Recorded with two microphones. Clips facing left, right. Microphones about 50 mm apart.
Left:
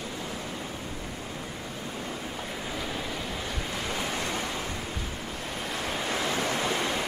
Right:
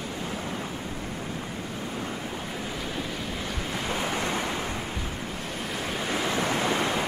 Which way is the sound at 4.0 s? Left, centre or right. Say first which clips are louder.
Right 4 dB; right.